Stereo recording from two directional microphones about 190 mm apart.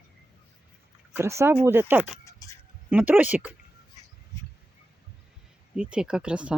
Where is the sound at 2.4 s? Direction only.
20° left (ahead or behind).